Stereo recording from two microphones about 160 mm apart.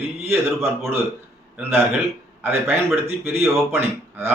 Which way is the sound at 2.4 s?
15° right (ahead or behind).